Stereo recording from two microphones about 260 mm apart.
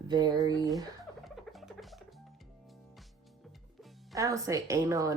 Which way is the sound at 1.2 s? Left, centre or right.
Centre.